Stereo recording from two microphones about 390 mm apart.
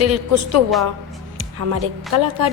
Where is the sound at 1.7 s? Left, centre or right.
Right.